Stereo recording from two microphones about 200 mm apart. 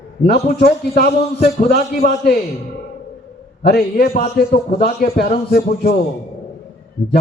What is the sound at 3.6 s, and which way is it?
A man's voice, 50° left (ahead or behind).